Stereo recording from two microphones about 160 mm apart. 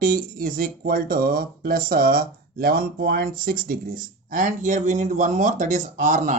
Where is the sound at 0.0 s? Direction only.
60° right (ahead or behind).